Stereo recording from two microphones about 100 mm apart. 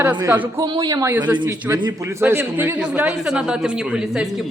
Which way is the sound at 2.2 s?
25° right (ahead or behind).